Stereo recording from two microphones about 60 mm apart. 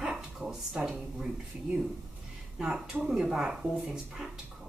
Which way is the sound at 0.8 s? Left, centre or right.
Right.